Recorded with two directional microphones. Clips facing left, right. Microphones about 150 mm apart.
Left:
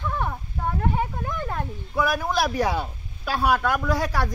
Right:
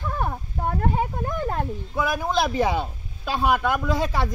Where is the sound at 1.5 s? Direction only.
20° right (ahead or behind).